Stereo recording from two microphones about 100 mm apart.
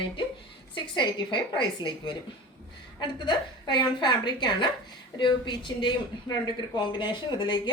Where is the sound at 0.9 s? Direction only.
50° left (ahead or behind).